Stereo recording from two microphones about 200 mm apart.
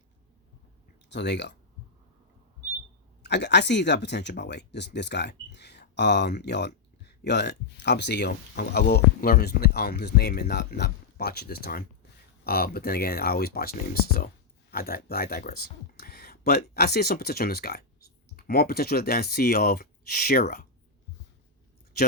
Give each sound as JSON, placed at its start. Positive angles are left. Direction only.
{"t": 1.1, "sound": "speech", "side_deg": 60}
{"t": 3.2, "sound": "speech", "side_deg": 60}